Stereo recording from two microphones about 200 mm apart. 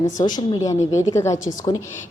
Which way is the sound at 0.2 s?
20° left (ahead or behind).